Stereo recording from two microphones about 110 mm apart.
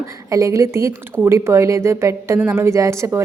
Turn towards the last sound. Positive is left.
turn(degrees=-25)  # may be behind; listen again after turning